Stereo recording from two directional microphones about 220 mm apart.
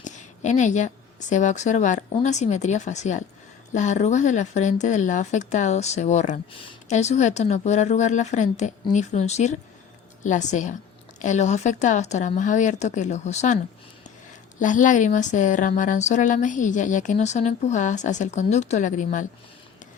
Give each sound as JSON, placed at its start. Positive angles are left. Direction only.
{"t": 0.0, "sound": "a sound", "side_deg": 35}
{"t": 1.3, "sound": "speech", "side_deg": 35}
{"t": 14.6, "sound": "speech", "side_deg": 35}